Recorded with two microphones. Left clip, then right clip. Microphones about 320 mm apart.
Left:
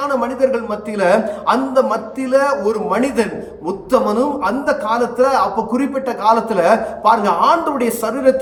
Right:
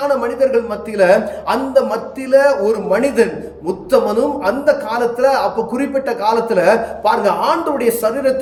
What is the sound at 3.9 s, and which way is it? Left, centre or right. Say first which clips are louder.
Speech: right 1 dB; left.